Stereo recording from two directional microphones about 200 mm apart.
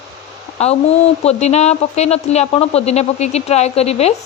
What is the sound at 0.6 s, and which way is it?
Speech, 30° left (ahead or behind).